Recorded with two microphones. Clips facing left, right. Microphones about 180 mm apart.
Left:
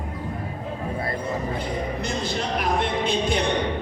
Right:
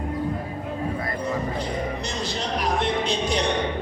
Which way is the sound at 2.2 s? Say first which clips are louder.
Even; 55° left (ahead or behind).